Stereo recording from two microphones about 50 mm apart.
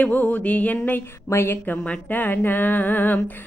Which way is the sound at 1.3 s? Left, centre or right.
Left.